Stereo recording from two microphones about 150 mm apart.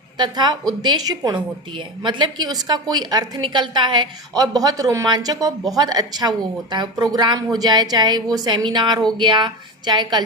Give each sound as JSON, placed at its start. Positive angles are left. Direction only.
{"t": 0.2, "sound": "a woman's voice", "side_deg": -30}